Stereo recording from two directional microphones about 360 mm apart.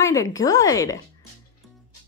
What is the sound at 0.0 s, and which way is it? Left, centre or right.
Speech, centre.